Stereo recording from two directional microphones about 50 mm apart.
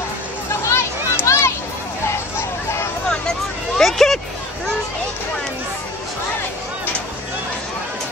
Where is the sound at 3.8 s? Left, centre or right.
Centre.